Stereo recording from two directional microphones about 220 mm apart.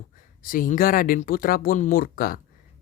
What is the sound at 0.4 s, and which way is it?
Speech, 40° left (ahead or behind).